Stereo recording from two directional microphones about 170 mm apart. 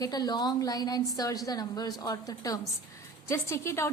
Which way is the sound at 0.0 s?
25° left (ahead or behind).